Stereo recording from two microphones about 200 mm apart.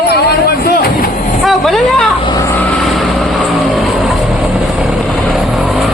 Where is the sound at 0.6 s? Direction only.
50° left (ahead or behind).